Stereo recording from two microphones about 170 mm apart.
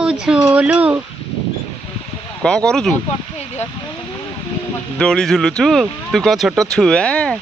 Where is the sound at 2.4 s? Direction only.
5° left (ahead or behind).